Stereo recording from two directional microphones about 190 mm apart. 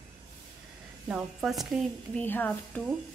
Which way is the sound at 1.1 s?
5° right (ahead or behind).